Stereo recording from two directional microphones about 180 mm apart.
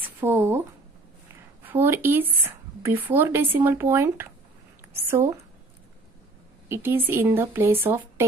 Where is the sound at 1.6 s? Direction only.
10° right (ahead or behind).